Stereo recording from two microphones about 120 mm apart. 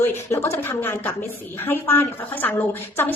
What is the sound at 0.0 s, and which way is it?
Speech, 20° left (ahead or behind).